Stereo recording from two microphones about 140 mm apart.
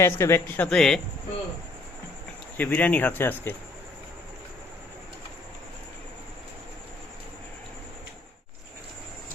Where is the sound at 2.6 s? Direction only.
15° left (ahead or behind).